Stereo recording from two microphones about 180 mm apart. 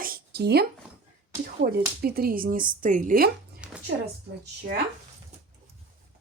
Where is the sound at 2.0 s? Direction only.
55° right (ahead or behind).